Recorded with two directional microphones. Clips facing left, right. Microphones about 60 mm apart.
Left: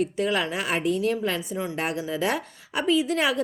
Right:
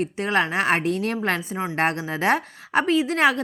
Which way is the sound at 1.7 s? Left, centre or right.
Right.